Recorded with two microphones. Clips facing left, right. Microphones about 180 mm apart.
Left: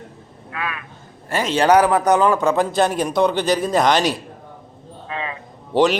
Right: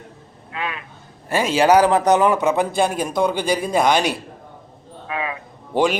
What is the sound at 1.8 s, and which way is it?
A man's voice, 25° right (ahead or behind).